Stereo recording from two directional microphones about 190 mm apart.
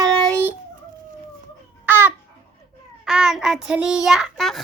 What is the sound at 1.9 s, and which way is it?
Babbling, 10° right (ahead or behind).